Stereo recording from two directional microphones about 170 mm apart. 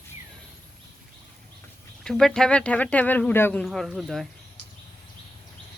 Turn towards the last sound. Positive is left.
turn(degrees=0)  # may be behind; listen again after turning